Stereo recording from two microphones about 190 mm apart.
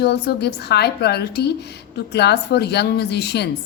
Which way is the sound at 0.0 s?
60° left (ahead or behind).